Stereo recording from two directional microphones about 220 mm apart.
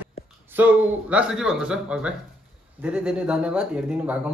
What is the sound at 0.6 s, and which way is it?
Speech, 5° right (ahead or behind).